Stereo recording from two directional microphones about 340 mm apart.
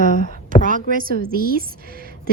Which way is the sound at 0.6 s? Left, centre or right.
Right.